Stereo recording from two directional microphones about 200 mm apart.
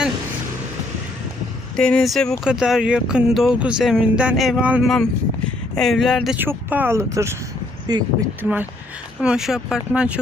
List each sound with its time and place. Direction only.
1.7 s speech: 5° left (ahead or behind); by 8.3 s 20° right (ahead or behind)
8.4 s speech: 10° right (ahead or behind)